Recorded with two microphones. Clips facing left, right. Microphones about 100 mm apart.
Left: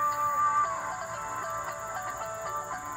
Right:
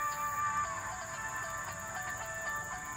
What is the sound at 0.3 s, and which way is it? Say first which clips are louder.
Music: left 9 dB; 55° left (ahead or behind).